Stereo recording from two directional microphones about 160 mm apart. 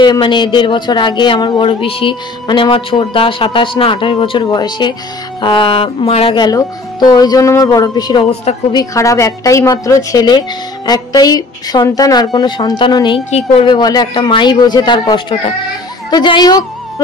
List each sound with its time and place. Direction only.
0.0 s speech: 30° left (ahead or behind)